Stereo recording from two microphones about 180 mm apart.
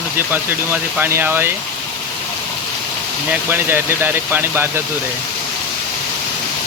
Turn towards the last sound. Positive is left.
turn(degrees=-10)  # may be behind; listen again after turning